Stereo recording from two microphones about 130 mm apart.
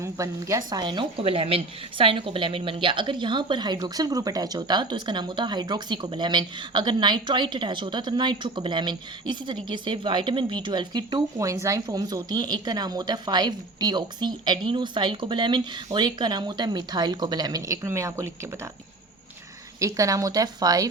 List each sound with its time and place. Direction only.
0.0 s a woman's voice: 25° right (ahead or behind)
19.8 s a woman's voice: 25° right (ahead or behind)